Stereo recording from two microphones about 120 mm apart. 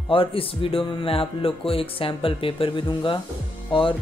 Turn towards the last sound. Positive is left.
turn(degrees=45)  # may be behind; listen again after turning